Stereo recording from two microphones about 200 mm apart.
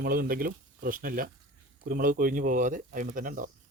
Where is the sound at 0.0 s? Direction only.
45° right (ahead or behind).